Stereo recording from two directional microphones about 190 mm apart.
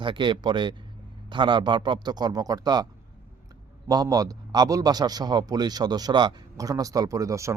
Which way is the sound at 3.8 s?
20° right (ahead or behind).